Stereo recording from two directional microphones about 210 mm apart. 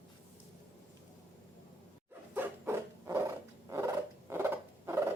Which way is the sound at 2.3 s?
10° right (ahead or behind).